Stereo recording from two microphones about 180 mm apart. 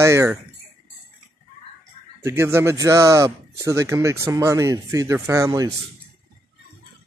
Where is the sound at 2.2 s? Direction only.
15° right (ahead or behind).